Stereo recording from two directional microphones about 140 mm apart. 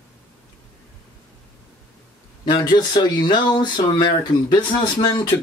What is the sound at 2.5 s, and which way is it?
Speech, 30° left (ahead or behind).